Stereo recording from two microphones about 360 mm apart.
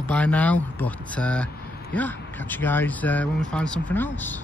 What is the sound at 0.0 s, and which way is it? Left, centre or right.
Speech, centre.